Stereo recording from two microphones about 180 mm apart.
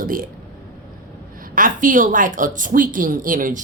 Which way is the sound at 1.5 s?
45° right (ahead or behind).